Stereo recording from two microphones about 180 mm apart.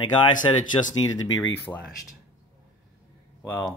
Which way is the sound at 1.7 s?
5° left (ahead or behind).